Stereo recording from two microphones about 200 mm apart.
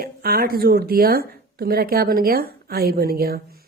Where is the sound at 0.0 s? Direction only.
50° right (ahead or behind).